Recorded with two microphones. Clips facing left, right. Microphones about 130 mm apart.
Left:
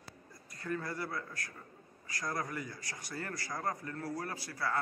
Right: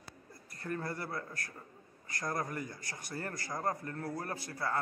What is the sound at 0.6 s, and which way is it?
Speech, 25° right (ahead or behind).